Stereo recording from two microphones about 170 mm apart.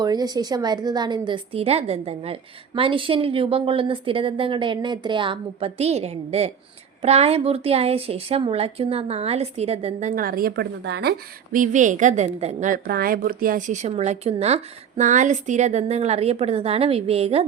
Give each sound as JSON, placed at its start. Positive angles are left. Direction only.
{"t": 0.0, "sound": "a woman's voice", "side_deg": -25}
{"t": 11.5, "sound": "a woman's voice", "side_deg": -50}